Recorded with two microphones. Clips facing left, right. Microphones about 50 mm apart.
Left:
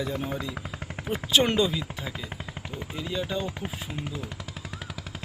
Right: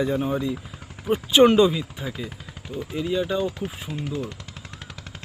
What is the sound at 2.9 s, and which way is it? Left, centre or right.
Speech, centre.